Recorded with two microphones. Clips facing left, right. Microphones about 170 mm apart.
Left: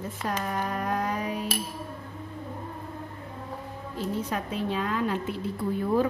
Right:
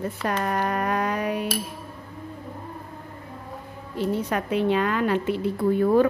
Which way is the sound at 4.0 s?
70° right (ahead or behind).